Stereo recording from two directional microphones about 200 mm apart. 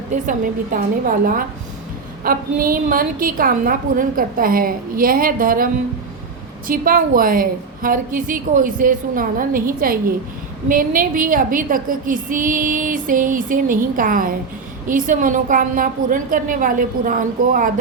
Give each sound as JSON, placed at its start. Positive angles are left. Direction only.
{"t": 0.1, "sound": "a woman's voice", "side_deg": -40}
{"t": 6.7, "sound": "a woman's voice", "side_deg": -45}